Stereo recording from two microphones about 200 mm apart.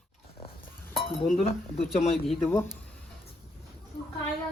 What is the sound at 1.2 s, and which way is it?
Speech, 35° left (ahead or behind).